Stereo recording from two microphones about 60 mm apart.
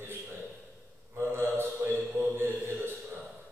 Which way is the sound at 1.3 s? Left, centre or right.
Right.